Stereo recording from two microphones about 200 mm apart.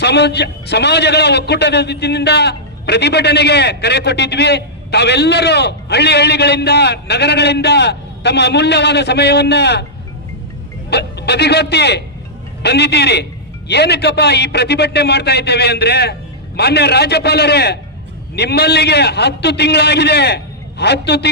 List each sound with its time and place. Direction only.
0.0 s a man's voice: 55° left (ahead or behind)
10.8 s a man's voice: 55° left (ahead or behind)